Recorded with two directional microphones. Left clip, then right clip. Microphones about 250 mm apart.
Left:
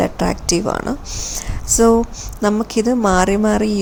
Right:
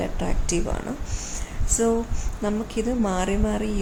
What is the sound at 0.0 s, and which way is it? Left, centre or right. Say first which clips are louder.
A woman's voice: left 11 dB; left.